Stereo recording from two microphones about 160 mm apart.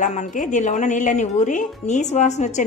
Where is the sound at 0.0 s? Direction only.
50° left (ahead or behind).